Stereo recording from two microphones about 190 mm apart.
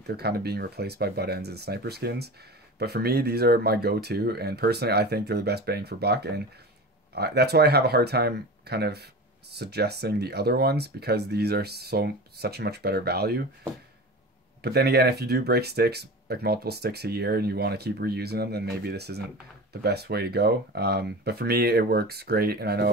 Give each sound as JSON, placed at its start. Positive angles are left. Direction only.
{"t": 0.0, "sound": "speech", "side_deg": -60}
{"t": 14.6, "sound": "speech", "side_deg": -60}